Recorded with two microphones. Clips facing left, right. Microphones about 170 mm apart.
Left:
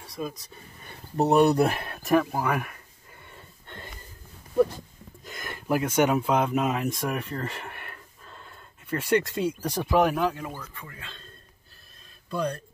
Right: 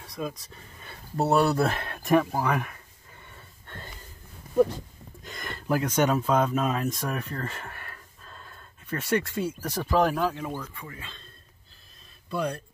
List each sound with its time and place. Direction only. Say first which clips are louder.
0.2 s speech: even; 5° left (ahead or behind)
1.1 s speech: left 3 dB; 20° left (ahead or behind)
3.3 s a sound: left 2 dB; 15° left (ahead or behind)
5.2 s speech: right 1 dB; 5° left (ahead or behind)
10.5 s speech: right 4 dB; 10° right (ahead or behind)
12.3 s speech: even; 10° right (ahead or behind)